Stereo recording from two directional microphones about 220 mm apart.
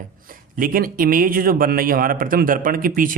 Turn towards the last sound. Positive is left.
turn(degrees=-40)  # may be behind; listen again after turning